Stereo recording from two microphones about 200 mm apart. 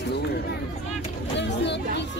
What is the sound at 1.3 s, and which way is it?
Speech, 60° left (ahead or behind).